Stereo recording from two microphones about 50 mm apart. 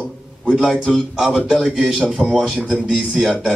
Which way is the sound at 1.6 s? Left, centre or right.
Right.